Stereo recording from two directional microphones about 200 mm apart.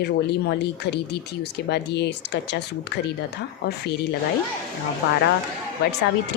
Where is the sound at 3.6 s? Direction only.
55° left (ahead or behind).